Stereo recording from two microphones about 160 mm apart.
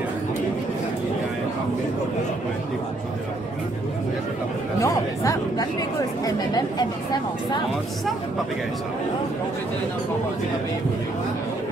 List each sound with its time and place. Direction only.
4.8 s chatter: 20° left (ahead or behind)